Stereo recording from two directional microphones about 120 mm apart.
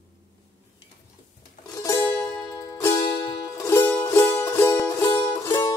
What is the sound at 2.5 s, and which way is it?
Music, 25° left (ahead or behind).